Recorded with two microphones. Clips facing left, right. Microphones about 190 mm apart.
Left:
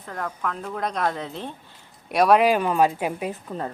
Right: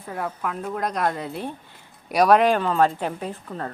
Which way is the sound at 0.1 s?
10° right (ahead or behind).